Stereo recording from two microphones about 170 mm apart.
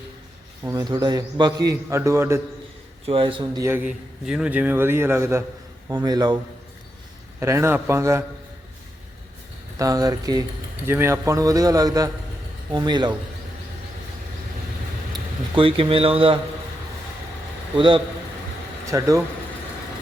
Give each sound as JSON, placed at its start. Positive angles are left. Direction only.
{"t": 0.6, "sound": "a man's voice", "side_deg": -15}
{"t": 3.1, "sound": "a man's voice", "side_deg": -30}
{"t": 3.8, "sound": "a man's voice", "side_deg": -5}
{"t": 9.7, "sound": "a man's voice", "side_deg": -20}
{"t": 15.1, "sound": "speech", "side_deg": -30}
{"t": 17.7, "sound": "a man's voice", "side_deg": -30}